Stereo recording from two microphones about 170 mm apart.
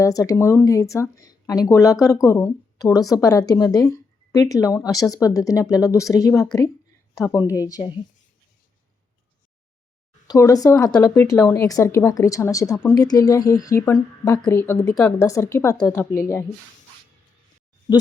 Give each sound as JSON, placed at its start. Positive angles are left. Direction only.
{"t": 0.0, "sound": "speech", "side_deg": 20}
{"t": 7.5, "sound": "speech", "side_deg": 20}
{"t": 10.2, "sound": "speech", "side_deg": 20}